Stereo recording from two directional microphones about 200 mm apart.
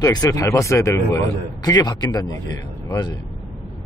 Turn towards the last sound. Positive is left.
turn(degrees=20)  # may be behind; listen again after turning